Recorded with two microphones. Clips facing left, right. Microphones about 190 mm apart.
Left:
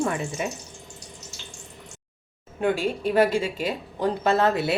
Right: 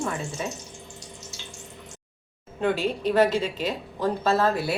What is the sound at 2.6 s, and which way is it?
Speech, 10° left (ahead or behind).